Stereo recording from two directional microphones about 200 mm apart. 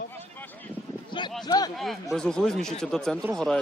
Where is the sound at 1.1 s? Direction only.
20° left (ahead or behind).